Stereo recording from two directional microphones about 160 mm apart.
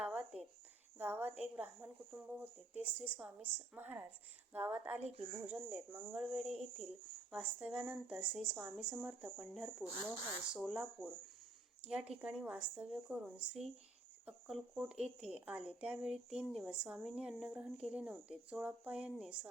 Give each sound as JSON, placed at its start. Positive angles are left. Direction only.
{"t": 0.0, "sound": "a sound", "side_deg": -5}
{"t": 0.9, "sound": "a woman's voice", "side_deg": -10}
{"t": 5.0, "sound": "speech", "side_deg": -40}
{"t": 5.5, "sound": "a woman's voice", "side_deg": -10}